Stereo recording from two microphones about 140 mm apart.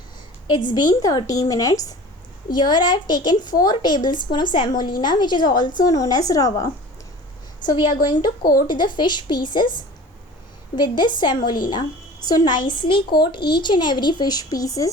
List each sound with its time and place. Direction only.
0.7 s a woman's voice: 30° left (ahead or behind)
10.8 s speech: 35° left (ahead or behind)